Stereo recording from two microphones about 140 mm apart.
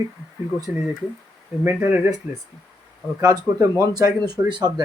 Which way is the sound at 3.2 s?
25° right (ahead or behind).